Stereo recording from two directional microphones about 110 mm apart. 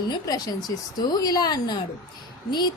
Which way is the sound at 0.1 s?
35° left (ahead or behind).